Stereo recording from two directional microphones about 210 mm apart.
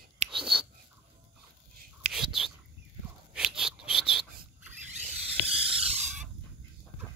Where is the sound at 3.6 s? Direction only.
5° right (ahead or behind).